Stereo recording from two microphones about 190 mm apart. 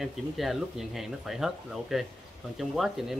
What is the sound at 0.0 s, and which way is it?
Speech, centre (ahead or behind).